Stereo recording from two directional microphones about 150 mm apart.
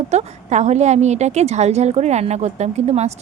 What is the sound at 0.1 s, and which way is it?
A woman's voice, 50° right (ahead or behind).